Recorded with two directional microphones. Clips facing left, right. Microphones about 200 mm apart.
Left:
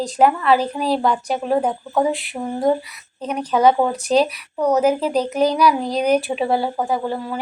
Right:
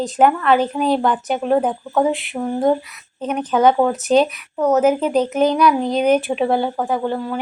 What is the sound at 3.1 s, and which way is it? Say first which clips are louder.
A woman's voice: right 2 dB; 5° right (ahead or behind).